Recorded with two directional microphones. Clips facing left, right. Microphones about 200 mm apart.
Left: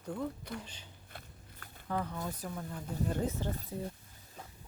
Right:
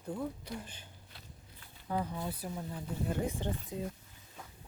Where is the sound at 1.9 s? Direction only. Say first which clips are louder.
Right 1 dB; 15° right (ahead or behind).